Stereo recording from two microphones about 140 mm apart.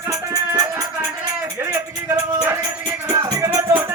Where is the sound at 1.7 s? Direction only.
15° right (ahead or behind).